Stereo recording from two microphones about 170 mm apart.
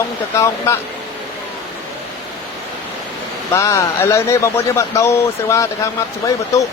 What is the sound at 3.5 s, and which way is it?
A man's voice, 20° left (ahead or behind).